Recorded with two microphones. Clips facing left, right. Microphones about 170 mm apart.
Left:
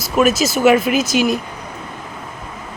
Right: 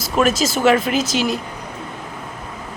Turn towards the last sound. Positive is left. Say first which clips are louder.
# left 3 dB
turn(degrees=15)  # may be behind; listen again after turning